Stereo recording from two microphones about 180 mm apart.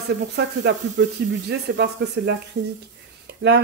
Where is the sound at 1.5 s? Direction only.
65° right (ahead or behind).